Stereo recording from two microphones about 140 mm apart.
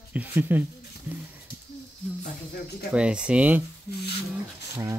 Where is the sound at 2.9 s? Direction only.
5° right (ahead or behind).